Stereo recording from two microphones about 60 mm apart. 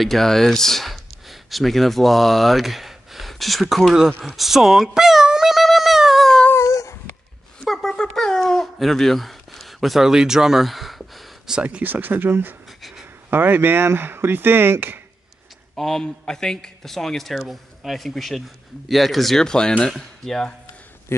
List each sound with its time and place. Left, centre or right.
0.0 s speech: centre
4.4 s dog: centre
6.5 s dog: left
7.6 s a sound: centre
11.6 s speech: right
12.6 s a sound: centre
13.3 s speech: right
15.7 s a man's voice: centre
21.1 s speech: left